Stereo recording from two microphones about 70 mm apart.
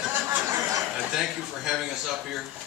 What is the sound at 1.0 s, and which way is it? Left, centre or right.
A man's voice, centre.